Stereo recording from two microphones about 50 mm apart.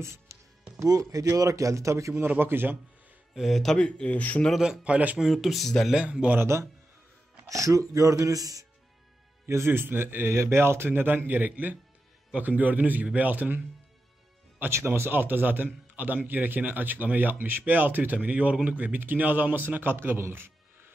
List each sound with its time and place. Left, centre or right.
0.0 s music: right
0.7 s speech: right
2.2 s speech: right
3.3 s speech: centre
3.7 s speech: left
4.8 s speech: right
5.3 s speech: centre
5.9 s speech: right
6.4 s a man's voice: right
7.4 s speech: right
9.5 s speech: right
10.3 s a man's voice: right
14.8 s a man's voice: right